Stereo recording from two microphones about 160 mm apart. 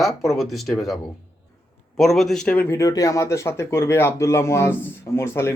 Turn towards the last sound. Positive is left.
turn(degrees=15)  # may be behind; listen again after turning